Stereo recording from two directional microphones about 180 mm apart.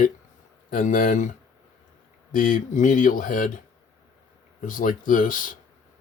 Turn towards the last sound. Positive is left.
turn(degrees=45)  # may be behind; listen again after turning